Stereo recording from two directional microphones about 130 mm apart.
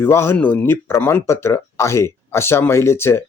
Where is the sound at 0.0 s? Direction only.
20° left (ahead or behind).